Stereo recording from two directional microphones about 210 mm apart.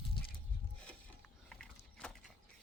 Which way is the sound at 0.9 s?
Centre (ahead or behind).